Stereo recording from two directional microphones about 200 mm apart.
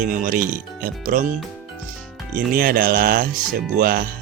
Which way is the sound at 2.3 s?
45° right (ahead or behind).